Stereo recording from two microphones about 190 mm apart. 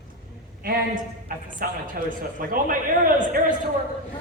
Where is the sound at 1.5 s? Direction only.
45° right (ahead or behind).